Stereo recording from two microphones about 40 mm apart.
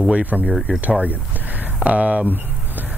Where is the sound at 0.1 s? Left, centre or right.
Right.